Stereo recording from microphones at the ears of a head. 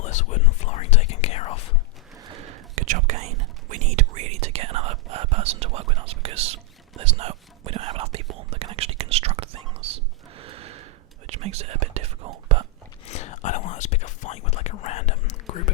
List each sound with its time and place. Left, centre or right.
0.0 s speech: left
2.1 s whispering: right
13.1 s whispering: left